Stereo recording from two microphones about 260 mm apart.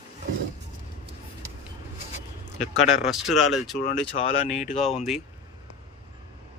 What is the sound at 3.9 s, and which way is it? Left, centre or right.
Speech, left.